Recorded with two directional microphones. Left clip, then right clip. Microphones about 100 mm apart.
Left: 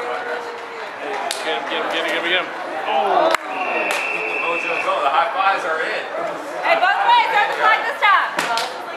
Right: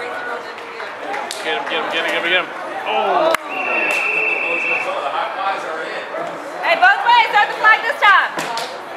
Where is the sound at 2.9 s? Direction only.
25° right (ahead or behind).